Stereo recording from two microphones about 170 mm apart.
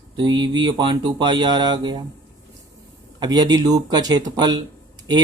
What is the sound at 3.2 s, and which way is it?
Speech, 25° right (ahead or behind).